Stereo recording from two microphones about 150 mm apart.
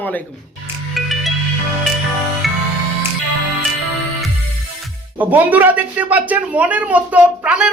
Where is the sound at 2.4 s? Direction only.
Centre (ahead or behind).